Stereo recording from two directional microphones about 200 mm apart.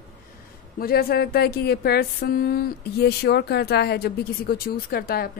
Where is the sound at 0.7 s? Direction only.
50° left (ahead or behind).